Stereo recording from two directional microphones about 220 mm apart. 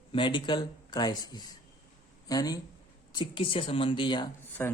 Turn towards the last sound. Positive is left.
turn(degrees=10)  # may be behind; listen again after turning